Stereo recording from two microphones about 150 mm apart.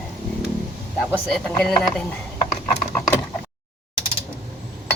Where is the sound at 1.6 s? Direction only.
5° left (ahead or behind).